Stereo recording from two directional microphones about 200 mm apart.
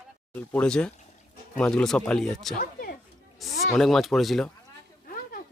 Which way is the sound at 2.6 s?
50° left (ahead or behind).